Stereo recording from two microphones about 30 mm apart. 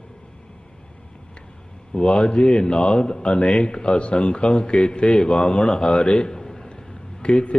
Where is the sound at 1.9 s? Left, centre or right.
Left.